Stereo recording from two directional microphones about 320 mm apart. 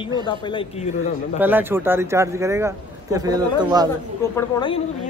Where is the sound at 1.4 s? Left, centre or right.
Centre.